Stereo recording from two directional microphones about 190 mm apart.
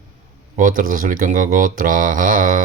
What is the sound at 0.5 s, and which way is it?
Speech, 45° right (ahead or behind).